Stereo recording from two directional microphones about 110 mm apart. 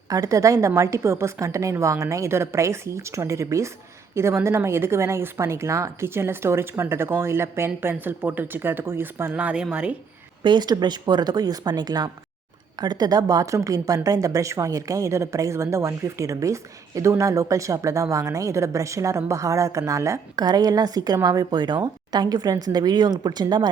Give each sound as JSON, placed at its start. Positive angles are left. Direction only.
{"t": 0.1, "sound": "a woman's voice", "side_deg": -30}
{"t": 10.4, "sound": "a woman's voice", "side_deg": -40}
{"t": 20.3, "sound": "a woman's voice", "side_deg": -40}